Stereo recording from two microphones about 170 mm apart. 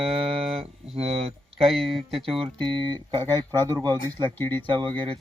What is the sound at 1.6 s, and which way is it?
Speech, centre (ahead or behind).